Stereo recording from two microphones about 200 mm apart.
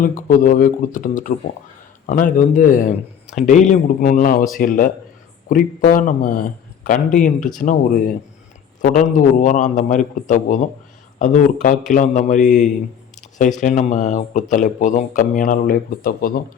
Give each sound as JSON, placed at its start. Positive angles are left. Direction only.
{"t": 0.0, "sound": "a man's voice", "side_deg": 40}